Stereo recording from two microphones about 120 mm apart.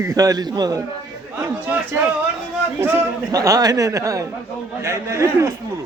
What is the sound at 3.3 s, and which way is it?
Speech, 30° right (ahead or behind).